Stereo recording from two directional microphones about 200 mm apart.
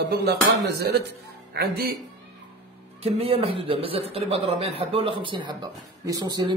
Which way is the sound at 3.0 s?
30° right (ahead or behind).